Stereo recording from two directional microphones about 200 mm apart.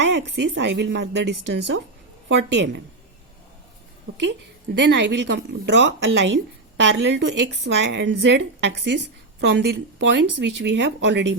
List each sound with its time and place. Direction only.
0.1 s a woman's voice: 60° right (ahead or behind)
2.3 s a woman's voice: 60° right (ahead or behind)
4.3 s a woman's voice: 65° right (ahead or behind)